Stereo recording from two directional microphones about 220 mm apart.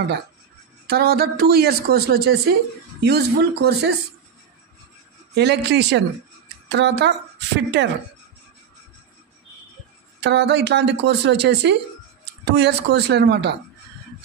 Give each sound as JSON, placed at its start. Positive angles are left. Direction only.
{"t": 0.8, "sound": "speech", "side_deg": -45}
{"t": 5.3, "sound": "speech", "side_deg": -50}
{"t": 10.2, "sound": "speech", "side_deg": -50}